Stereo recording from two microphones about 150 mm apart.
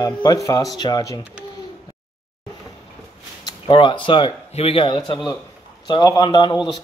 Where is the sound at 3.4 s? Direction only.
30° left (ahead or behind).